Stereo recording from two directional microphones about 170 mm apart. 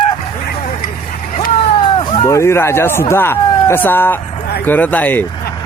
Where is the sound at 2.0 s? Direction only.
30° left (ahead or behind).